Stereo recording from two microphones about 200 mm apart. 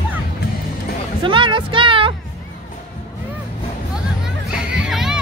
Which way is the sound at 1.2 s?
25° right (ahead or behind).